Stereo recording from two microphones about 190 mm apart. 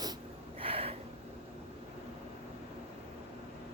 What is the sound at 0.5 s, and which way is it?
Gasp, 30° right (ahead or behind).